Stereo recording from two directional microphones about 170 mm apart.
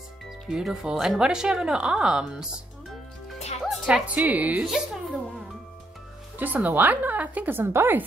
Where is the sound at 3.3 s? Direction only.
40° left (ahead or behind).